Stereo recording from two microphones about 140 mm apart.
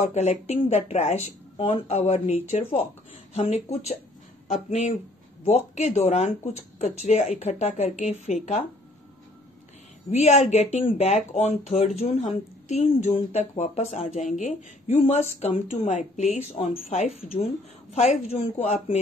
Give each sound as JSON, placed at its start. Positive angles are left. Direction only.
{"t": 0.1, "sound": "speech", "side_deg": 50}
{"t": 1.6, "sound": "speech", "side_deg": 40}
{"t": 3.3, "sound": "speech", "side_deg": 50}
{"t": 10.1, "sound": "speech", "side_deg": 55}
{"t": 15.9, "sound": "speech", "side_deg": 55}